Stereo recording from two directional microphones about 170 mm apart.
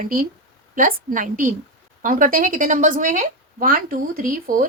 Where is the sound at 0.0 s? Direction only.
55° right (ahead or behind).